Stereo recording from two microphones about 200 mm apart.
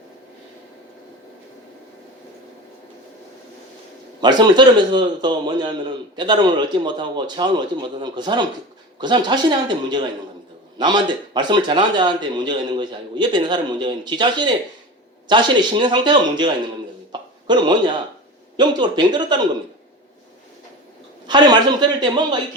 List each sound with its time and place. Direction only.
4.2 s a man's voice: 20° right (ahead or behind)
17.1 s a sound: 25° right (ahead or behind)
18.5 s a man's voice: 20° right (ahead or behind)
21.2 s a man's voice: 20° right (ahead or behind)